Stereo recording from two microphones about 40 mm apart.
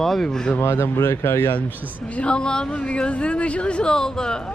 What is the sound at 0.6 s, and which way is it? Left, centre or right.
Speech, left.